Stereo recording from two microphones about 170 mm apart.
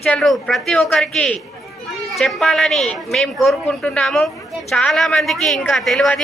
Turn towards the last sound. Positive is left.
turn(degrees=0)  # may be behind; listen again after turning